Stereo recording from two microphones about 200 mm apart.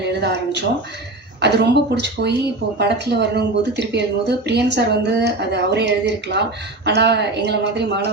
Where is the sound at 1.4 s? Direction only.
55° right (ahead or behind).